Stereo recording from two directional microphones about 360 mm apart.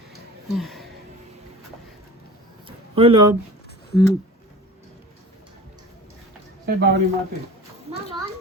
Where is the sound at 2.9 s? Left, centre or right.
Centre.